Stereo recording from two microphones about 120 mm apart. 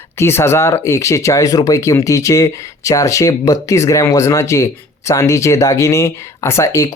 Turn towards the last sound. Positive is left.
turn(degrees=25)  # may be behind; listen again after turning